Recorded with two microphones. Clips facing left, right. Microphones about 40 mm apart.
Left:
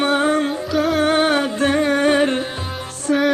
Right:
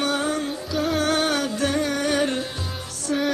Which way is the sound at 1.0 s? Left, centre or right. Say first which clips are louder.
Left 6 dB; left.